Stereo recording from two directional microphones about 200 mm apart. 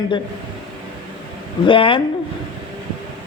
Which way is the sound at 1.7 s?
25° left (ahead or behind).